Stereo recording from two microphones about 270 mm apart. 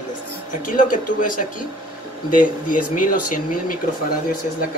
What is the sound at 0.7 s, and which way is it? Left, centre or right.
Speech, left.